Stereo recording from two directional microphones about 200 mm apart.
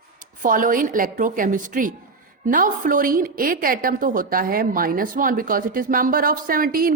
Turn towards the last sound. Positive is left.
turn(degrees=-45)  # may be behind; listen again after turning